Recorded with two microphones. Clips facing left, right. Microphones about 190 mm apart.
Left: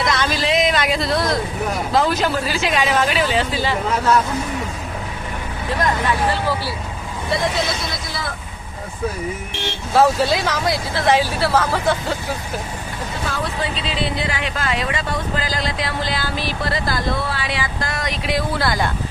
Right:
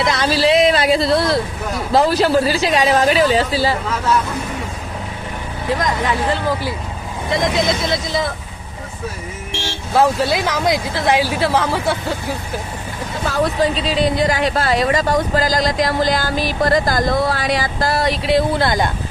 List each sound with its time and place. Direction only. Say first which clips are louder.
0.1 s a sound: right 7 dB; 35° right (ahead or behind)
2.0 s speech: right 6 dB; 35° right (ahead or behind)
7.3 s speech: right 4 dB; 20° right (ahead or behind)
9.9 s speech: even; 15° right (ahead or behind)
13.2 s speech: right 9 dB; 40° right (ahead or behind); by 18.9 s 20° right (ahead or behind)